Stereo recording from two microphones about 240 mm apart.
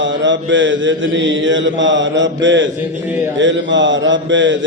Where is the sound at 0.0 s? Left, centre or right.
Right.